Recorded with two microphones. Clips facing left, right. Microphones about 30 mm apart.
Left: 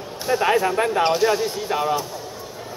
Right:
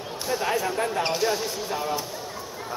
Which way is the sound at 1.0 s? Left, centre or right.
Centre.